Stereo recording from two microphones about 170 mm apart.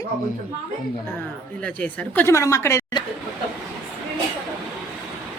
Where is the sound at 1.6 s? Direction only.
10° left (ahead or behind).